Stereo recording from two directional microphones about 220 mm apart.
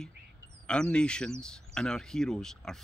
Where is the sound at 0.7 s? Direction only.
5° left (ahead or behind).